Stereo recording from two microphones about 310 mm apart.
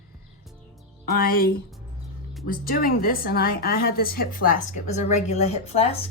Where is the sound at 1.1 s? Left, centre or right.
Left.